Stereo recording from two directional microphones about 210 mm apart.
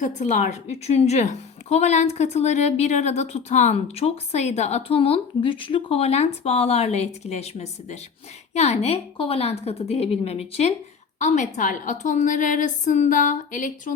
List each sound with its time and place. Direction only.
0.0 s a woman's voice: 35° left (ahead or behind)